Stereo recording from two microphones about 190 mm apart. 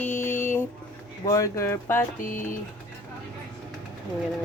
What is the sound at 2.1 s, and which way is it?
Speech, 45° left (ahead or behind).